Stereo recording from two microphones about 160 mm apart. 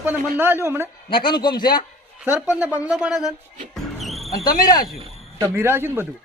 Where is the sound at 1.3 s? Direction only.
30° left (ahead or behind).